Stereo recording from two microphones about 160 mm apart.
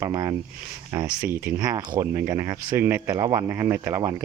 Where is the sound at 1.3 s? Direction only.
15° right (ahead or behind).